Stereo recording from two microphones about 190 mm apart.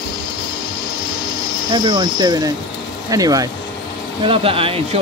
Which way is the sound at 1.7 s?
25° right (ahead or behind).